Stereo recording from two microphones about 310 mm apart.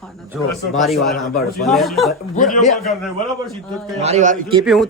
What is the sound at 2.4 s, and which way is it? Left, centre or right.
Speech, left.